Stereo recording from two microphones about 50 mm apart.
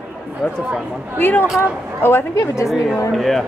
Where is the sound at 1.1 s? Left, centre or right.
Left.